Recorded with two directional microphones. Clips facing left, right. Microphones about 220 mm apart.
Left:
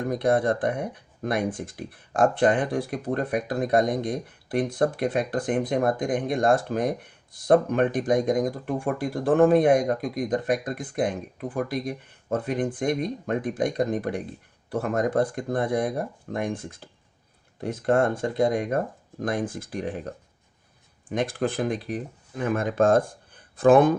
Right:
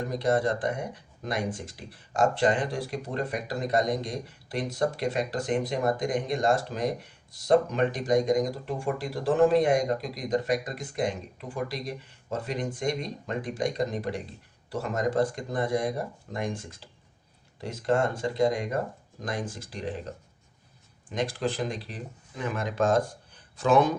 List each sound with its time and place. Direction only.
0.0 s speech: 55° left (ahead or behind)